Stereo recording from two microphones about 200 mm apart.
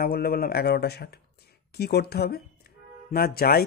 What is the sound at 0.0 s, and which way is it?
Speech, 50° left (ahead or behind).